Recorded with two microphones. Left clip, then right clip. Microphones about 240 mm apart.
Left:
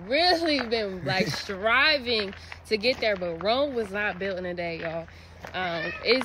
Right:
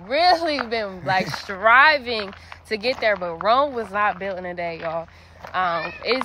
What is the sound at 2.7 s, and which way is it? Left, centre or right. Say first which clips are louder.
Speech: right 3 dB; centre.